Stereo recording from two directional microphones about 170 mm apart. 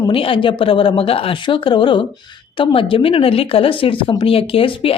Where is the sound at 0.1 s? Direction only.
30° left (ahead or behind).